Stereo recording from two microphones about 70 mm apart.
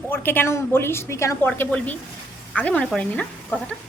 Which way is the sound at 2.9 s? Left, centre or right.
Centre.